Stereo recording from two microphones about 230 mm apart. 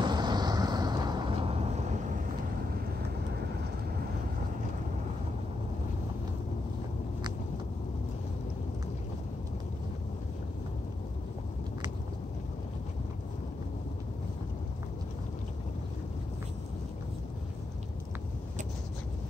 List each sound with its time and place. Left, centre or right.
0.0 s vehicle: centre